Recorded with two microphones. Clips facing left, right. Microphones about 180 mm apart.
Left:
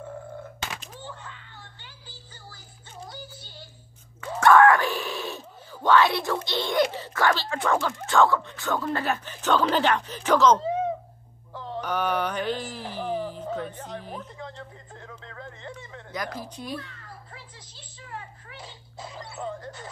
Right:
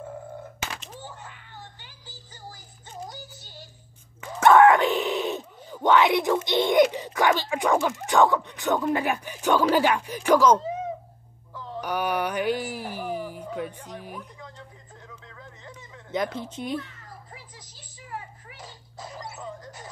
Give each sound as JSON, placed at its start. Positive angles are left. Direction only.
{"t": 4.2, "sound": "speech", "side_deg": -20}
{"t": 11.8, "sound": "speech", "side_deg": -10}
{"t": 15.0, "sound": "speech", "side_deg": 65}
{"t": 16.1, "sound": "speech", "side_deg": -25}
{"t": 19.1, "sound": "music", "side_deg": 30}
{"t": 19.4, "sound": "music", "side_deg": 60}